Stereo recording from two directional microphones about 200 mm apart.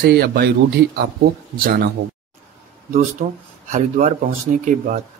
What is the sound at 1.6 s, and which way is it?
Speech, 50° right (ahead or behind).